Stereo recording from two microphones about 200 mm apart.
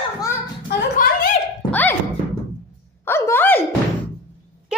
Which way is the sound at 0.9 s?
45° left (ahead or behind).